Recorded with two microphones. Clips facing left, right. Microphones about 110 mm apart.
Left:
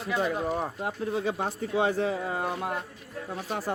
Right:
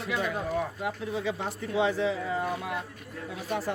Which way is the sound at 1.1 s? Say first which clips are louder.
Left 2 dB; 50° left (ahead or behind).